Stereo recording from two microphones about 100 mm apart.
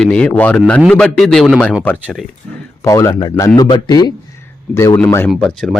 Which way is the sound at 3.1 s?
50° left (ahead or behind).